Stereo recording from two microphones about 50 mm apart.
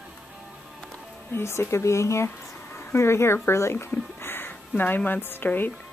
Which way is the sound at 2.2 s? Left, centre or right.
Left.